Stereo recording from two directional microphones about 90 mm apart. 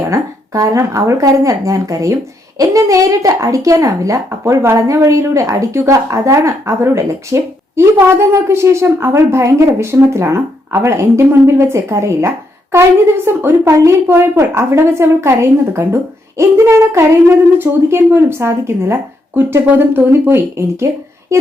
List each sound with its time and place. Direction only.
0.1 s a woman's voice: 40° right (ahead or behind)